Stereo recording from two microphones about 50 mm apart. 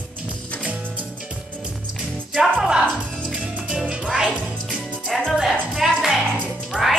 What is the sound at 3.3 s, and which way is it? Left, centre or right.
Music, right.